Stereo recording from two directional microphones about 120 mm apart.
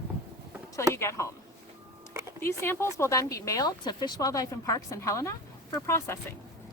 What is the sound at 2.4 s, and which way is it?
Speech, 20° left (ahead or behind).